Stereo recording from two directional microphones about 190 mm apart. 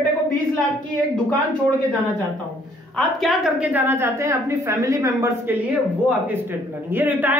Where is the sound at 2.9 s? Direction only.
Centre (ahead or behind).